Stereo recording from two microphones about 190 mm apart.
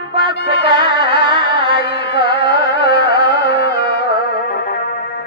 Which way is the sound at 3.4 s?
60° left (ahead or behind).